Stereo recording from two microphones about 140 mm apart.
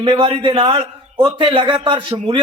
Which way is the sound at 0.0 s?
35° right (ahead or behind).